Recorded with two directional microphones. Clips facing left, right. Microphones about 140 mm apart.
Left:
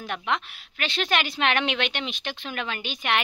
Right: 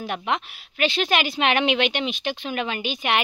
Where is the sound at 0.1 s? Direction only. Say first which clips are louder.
Right 1 dB; 10° right (ahead or behind).